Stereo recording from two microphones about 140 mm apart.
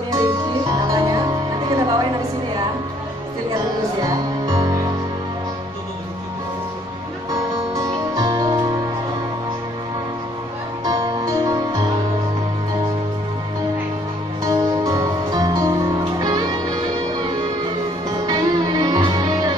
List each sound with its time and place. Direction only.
0.1 s music: 25° right (ahead or behind)
4.0 s music: 25° right (ahead or behind)
7.7 s music: 25° right (ahead or behind)
10.9 s music: 30° right (ahead or behind)
14.4 s music: 25° right (ahead or behind)
18.2 s music: 30° right (ahead or behind)